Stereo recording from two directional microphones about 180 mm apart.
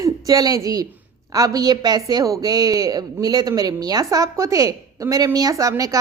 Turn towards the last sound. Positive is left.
turn(degrees=-20)  # may be behind; listen again after turning